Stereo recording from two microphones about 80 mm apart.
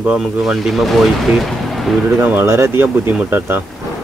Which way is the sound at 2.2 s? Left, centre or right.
Right.